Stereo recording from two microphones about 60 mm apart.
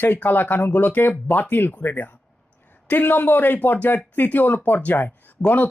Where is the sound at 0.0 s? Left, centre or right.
Left.